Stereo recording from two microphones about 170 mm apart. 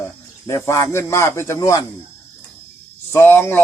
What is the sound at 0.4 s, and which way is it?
A man's voice, 15° left (ahead or behind).